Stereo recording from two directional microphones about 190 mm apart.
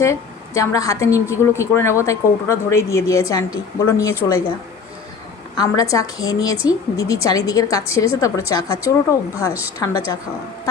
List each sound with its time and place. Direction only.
0.0 s speech: 15° left (ahead or behind)
5.5 s a woman's voice: 15° left (ahead or behind)